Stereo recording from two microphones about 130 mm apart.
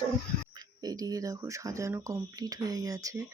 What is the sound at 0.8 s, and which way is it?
Speech, 30° right (ahead or behind).